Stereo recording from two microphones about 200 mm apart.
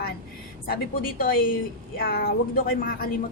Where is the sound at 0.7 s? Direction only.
45° left (ahead or behind).